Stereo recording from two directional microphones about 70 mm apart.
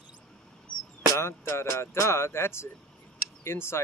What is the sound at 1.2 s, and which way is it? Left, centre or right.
Speech, left.